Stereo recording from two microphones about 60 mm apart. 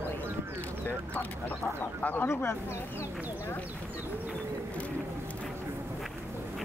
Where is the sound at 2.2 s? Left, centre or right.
Left.